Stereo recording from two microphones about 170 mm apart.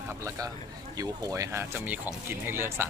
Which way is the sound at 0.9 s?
20° right (ahead or behind).